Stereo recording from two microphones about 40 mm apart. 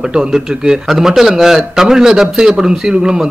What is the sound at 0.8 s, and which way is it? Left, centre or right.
A man's voice, centre.